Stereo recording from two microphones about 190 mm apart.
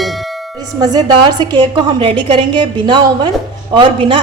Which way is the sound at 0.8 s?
20° right (ahead or behind).